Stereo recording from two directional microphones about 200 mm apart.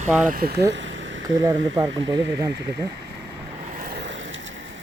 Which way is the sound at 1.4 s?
20° right (ahead or behind).